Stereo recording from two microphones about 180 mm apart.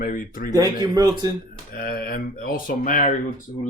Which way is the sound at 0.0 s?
50° left (ahead or behind).